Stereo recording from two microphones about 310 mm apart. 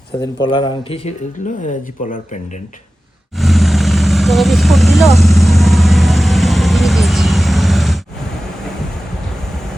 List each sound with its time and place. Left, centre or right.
0.4 s speech: centre
3.3 s vehicle: centre